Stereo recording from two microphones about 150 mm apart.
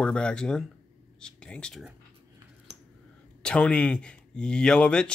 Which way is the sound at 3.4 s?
5° left (ahead or behind).